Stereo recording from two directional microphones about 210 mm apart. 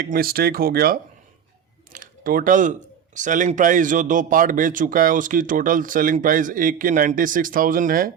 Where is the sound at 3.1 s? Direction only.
35° right (ahead or behind).